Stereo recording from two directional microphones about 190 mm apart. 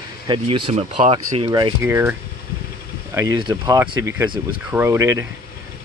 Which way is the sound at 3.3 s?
20° right (ahead or behind).